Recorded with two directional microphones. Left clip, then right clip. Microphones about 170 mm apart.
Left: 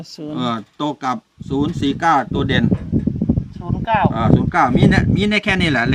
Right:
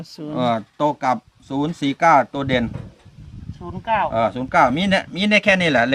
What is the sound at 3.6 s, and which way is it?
Speech, 30° left (ahead or behind).